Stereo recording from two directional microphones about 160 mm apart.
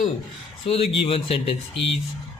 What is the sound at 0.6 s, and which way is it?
Speech, 35° left (ahead or behind).